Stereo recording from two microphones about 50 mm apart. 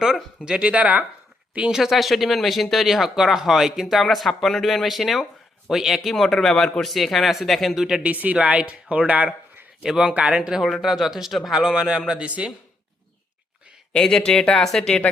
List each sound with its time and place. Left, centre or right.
0.4 s speech: centre
1.7 s speech: centre
8.0 s speech: right
9.8 s a man's voice: centre
10.1 s speech: right
10.6 s speech: centre
11.6 s a man's voice: centre
13.9 s speech: centre